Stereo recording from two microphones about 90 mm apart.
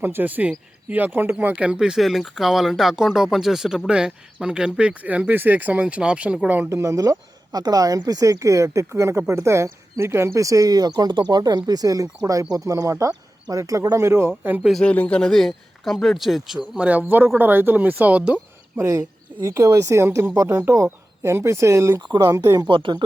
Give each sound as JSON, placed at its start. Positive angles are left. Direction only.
{"t": 0.0, "sound": "speech", "side_deg": -20}
{"t": 6.7, "sound": "speech", "side_deg": -35}
{"t": 14.6, "sound": "a man's voice", "side_deg": 0}
{"t": 14.8, "sound": "a man's voice", "side_deg": 15}
{"t": 18.8, "sound": "speech", "side_deg": -35}
{"t": 22.6, "sound": "speech", "side_deg": -60}